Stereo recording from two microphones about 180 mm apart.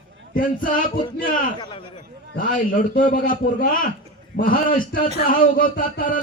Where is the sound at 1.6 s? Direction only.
30° left (ahead or behind).